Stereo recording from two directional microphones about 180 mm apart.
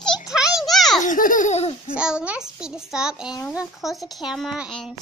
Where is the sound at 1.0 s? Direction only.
45° left (ahead or behind).